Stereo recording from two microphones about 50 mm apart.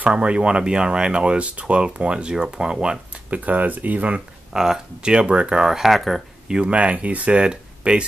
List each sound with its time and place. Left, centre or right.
0.0 s speech: right
3.3 s speech: right
4.6 s speech: centre
6.5 s speech: right